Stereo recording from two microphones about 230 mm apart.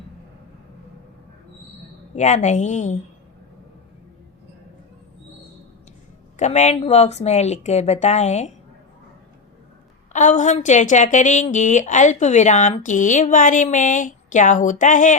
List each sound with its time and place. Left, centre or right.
2.1 s a woman's voice: left
6.3 s speech: left
10.1 s a woman's voice: left